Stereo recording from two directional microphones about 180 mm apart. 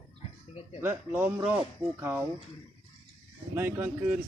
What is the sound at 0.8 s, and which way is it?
Speech, 10° right (ahead or behind).